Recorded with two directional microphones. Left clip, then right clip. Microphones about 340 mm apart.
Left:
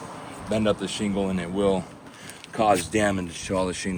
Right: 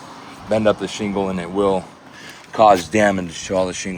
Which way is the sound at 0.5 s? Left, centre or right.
Centre.